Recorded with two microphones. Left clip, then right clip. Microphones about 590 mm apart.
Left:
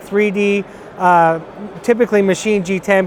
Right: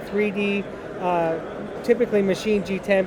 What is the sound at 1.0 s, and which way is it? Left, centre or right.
Speech, left.